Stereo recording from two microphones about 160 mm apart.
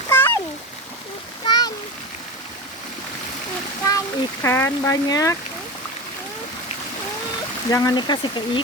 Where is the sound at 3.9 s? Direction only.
20° left (ahead or behind).